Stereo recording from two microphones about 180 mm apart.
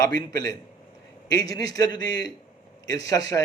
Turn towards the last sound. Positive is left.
turn(degrees=20)  # may be behind; listen again after turning